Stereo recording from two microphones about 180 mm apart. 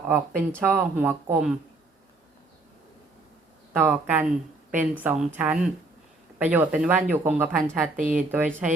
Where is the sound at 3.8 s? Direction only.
10° right (ahead or behind).